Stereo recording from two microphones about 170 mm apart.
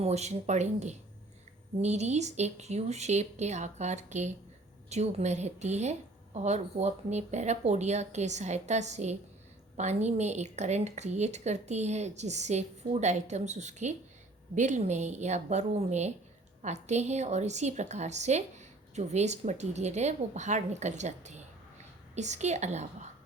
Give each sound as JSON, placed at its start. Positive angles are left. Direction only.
{"t": 0.0, "sound": "a woman's voice", "side_deg": -40}